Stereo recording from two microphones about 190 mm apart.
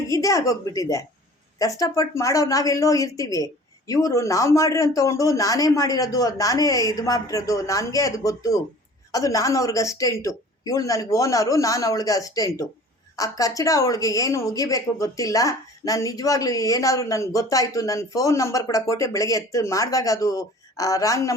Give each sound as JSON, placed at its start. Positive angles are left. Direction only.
{"t": 0.1, "sound": "speech", "side_deg": 15}